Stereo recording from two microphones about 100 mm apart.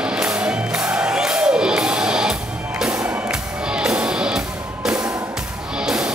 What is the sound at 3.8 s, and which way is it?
Music, 5° right (ahead or behind).